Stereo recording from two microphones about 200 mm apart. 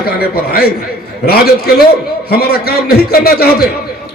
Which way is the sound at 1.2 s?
50° left (ahead or behind).